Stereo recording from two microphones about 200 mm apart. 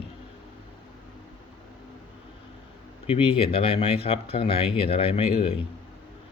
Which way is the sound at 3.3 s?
25° left (ahead or behind).